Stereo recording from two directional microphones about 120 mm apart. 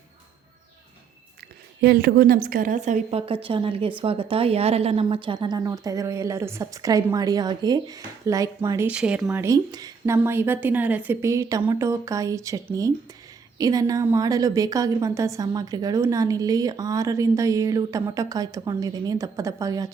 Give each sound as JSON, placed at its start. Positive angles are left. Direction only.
{"t": 2.6, "sound": "speech", "side_deg": -90}
{"t": 3.2, "sound": "a woman's voice", "side_deg": -50}
{"t": 8.9, "sound": "speech", "side_deg": -10}
{"t": 9.3, "sound": "a woman's voice", "side_deg": -20}
{"t": 9.7, "sound": "speech", "side_deg": -30}
{"t": 10.2, "sound": "a woman's voice", "side_deg": -20}